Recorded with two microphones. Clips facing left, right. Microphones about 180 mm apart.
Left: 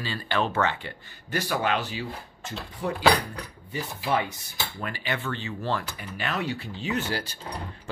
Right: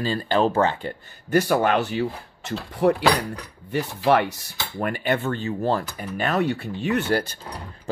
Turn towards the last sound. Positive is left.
turn(degrees=-55)  # may be behind; listen again after turning